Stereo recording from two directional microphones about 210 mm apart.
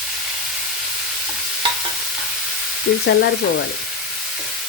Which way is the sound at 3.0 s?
55° left (ahead or behind).